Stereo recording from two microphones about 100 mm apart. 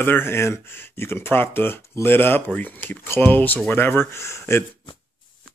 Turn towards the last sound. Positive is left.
turn(degrees=25)  # may be behind; listen again after turning